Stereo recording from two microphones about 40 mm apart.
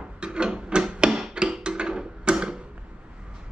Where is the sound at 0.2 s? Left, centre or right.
Right.